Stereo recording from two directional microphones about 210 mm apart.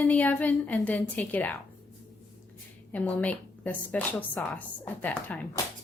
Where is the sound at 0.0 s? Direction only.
10° left (ahead or behind).